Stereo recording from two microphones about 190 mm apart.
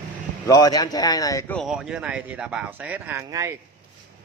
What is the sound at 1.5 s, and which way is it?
Speech, 5° right (ahead or behind).